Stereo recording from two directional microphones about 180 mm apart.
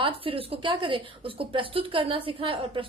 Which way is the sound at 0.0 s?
30° right (ahead or behind).